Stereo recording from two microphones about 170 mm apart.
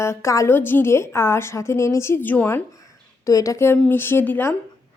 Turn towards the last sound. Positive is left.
turn(degrees=10)  # may be behind; listen again after turning